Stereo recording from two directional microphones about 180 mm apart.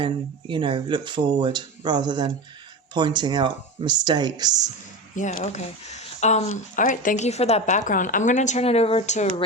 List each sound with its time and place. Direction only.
0.0 s speech: 30° right (ahead or behind)
5.1 s speech: 45° left (ahead or behind)